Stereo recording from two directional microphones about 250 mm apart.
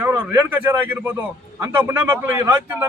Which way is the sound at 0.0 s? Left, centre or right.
Centre.